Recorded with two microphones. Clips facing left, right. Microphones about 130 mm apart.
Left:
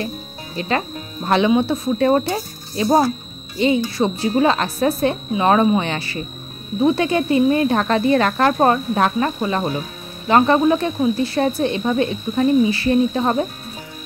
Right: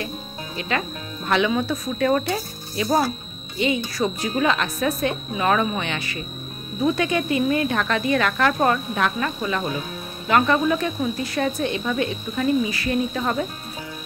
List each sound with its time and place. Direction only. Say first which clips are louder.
0.6 s speech: left 5 dB; 35° left (ahead or behind)